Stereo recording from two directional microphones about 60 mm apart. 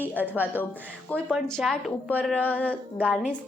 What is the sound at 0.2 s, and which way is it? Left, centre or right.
Speech, right.